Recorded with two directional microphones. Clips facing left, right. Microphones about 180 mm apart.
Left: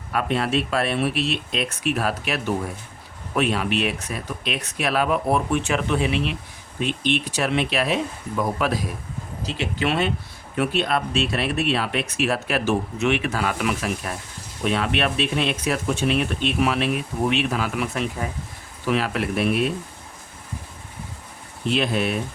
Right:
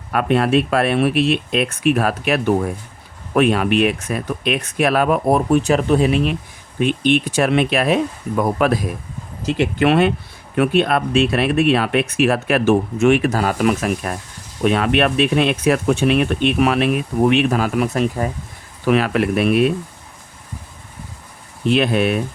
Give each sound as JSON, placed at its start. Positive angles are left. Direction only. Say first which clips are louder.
{"t": 0.1, "sound": "speech", "louder": "right 7 dB", "side_deg": -60}
{"t": 6.7, "sound": "speech", "louder": "right 7 dB", "side_deg": -55}
{"t": 18.9, "sound": "speech", "louder": "right 7 dB", "side_deg": -60}
{"t": 21.7, "sound": "speech", "louder": "right 6 dB", "side_deg": -60}